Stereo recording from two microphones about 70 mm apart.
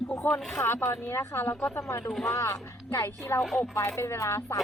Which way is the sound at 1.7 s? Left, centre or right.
Left.